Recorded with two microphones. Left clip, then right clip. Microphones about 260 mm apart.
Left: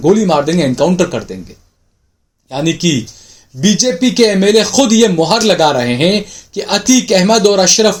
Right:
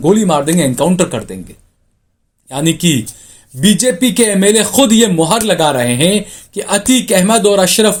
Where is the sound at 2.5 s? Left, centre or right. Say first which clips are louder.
Even; right.